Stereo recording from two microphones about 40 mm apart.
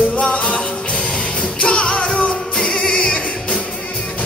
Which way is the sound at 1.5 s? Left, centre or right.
Left.